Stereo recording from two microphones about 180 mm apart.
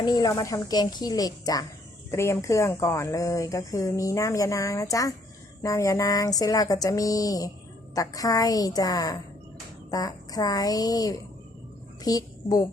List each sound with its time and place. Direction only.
0.0 s a woman's voice: 20° left (ahead or behind)